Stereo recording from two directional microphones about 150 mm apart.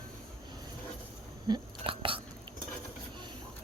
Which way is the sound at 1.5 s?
35° right (ahead or behind).